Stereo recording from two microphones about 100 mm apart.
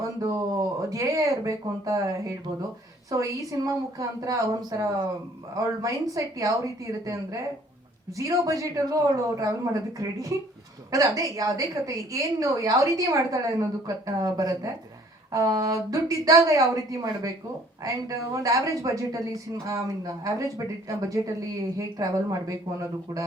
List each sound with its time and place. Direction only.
0.8 s a woman's voice: 35° right (ahead or behind)